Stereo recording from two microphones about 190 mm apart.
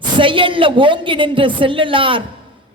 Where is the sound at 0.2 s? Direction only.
25° right (ahead or behind).